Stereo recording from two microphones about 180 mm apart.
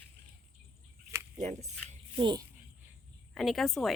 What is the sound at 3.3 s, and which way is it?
Speech, centre (ahead or behind).